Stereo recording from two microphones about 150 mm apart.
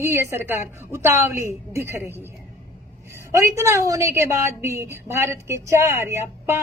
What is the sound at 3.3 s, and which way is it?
A woman's voice, 20° right (ahead or behind).